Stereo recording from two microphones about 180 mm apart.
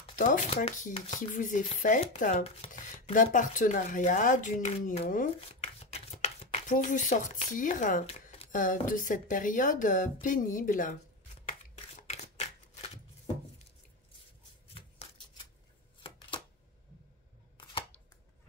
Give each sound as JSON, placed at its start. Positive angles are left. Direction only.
{"t": 0.1, "sound": "shuffling cards", "side_deg": 45}
{"t": 0.7, "sound": "speech", "side_deg": 40}
{"t": 11.4, "sound": "shuffling cards", "side_deg": 40}
{"t": 14.7, "sound": "a sound", "side_deg": 30}